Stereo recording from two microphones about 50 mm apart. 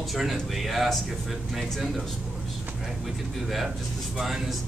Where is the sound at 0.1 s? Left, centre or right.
Centre.